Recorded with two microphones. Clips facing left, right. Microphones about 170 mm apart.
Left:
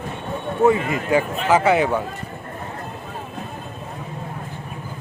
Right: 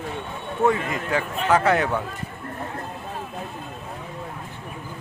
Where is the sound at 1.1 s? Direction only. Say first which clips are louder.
Left 3 dB; 5° left (ahead or behind).